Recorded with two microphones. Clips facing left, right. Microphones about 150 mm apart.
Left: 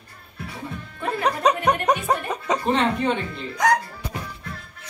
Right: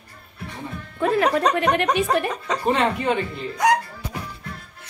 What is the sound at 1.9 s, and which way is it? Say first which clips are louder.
Speech: right 2 dB; 90° right.